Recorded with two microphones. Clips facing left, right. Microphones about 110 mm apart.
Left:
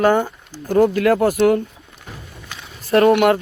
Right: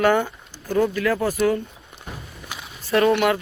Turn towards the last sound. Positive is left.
turn(degrees=50)  # may be behind; listen again after turning